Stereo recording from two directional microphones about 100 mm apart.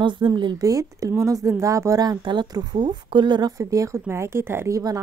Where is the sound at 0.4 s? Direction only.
40° right (ahead or behind).